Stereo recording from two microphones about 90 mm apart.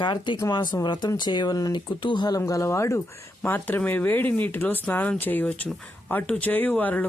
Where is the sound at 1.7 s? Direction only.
65° left (ahead or behind).